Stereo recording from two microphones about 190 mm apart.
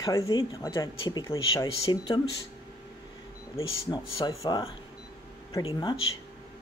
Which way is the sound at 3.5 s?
20° left (ahead or behind).